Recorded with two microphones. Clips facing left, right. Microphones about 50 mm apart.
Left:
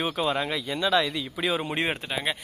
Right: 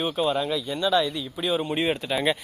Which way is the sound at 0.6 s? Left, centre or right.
Left.